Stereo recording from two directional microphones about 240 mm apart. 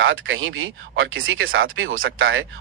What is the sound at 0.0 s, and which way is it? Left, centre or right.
Speech, right.